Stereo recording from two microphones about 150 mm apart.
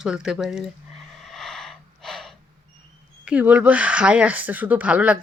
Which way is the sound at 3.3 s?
10° right (ahead or behind).